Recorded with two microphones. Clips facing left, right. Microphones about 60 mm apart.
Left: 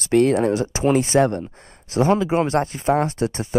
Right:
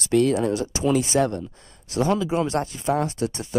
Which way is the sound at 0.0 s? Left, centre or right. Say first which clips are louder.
Left 3 dB; left.